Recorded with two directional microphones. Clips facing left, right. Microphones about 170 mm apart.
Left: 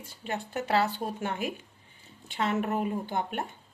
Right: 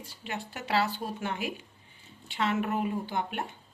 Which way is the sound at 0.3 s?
45° left (ahead or behind).